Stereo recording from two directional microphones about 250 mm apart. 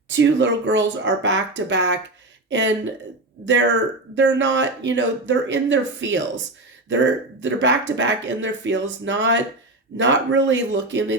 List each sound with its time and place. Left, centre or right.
0.1 s speech: right
4.1 s speech: right